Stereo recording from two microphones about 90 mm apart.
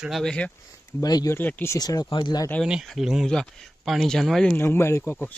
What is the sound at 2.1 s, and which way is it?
Speech, 60° left (ahead or behind).